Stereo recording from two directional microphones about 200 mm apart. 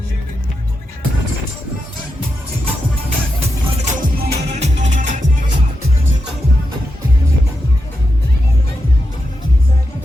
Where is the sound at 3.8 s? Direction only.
40° right (ahead or behind).